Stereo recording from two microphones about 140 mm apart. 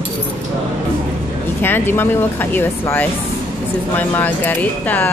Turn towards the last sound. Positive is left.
turn(degrees=10)  # may be behind; listen again after turning